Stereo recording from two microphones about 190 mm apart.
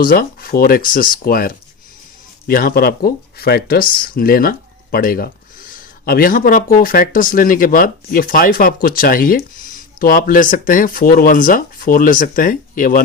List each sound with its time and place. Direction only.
0.0 s speech: 50° left (ahead or behind)